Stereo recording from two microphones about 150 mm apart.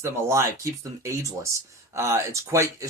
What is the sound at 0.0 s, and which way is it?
Speech, 15° right (ahead or behind).